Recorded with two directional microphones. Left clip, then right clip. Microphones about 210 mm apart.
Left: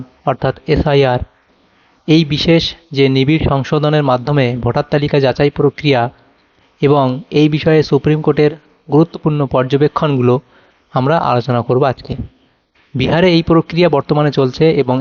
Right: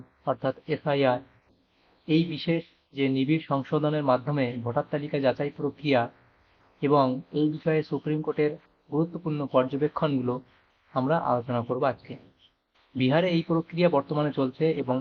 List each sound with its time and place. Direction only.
0.3 s speech: 45° left (ahead or behind)